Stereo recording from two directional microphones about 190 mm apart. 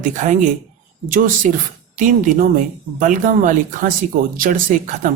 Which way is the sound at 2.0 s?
45° right (ahead or behind).